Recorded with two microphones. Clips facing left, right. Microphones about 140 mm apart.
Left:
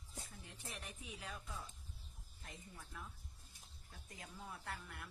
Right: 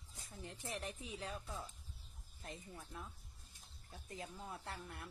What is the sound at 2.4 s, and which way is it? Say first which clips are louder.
Speech: right 5 dB; 30° right (ahead or behind).